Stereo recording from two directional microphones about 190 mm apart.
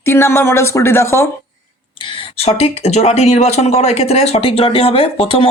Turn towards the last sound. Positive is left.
turn(degrees=30)  # may be behind; listen again after turning